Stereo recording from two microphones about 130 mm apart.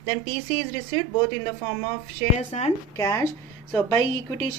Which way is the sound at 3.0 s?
25° left (ahead or behind).